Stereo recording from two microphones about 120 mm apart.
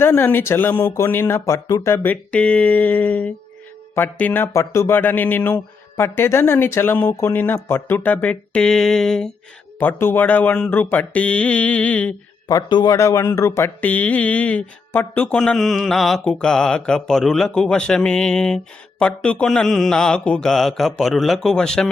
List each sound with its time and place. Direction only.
0.0 s speech: 20° left (ahead or behind)
2.3 s speech: 10° left (ahead or behind)
9.7 s speech: 15° left (ahead or behind)
12.5 s speech: 35° left (ahead or behind)
13.8 s speech: 10° left (ahead or behind)